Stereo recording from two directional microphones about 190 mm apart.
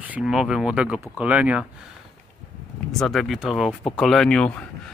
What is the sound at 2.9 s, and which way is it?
Speech, centre (ahead or behind).